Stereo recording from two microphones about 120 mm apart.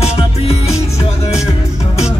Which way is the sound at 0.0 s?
65° left (ahead or behind).